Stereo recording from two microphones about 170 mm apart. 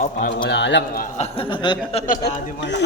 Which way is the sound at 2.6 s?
90° left.